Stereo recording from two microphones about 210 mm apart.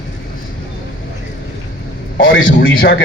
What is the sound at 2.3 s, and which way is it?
Speech, 70° left (ahead or behind).